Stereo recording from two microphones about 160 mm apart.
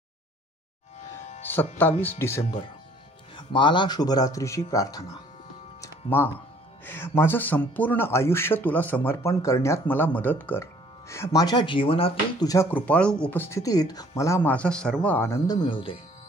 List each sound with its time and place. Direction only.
1.2 s music: 45° left (ahead or behind)
1.8 s speech: 10° left (ahead or behind)
3.3 s speech: 30° left (ahead or behind)
5.8 s music: 10° left (ahead or behind)
6.8 s speech: 15° left (ahead or behind); by 12.4 s 35° left (ahead or behind)
12.7 s speech: 10° left (ahead or behind); by 16.0 s 30° left (ahead or behind)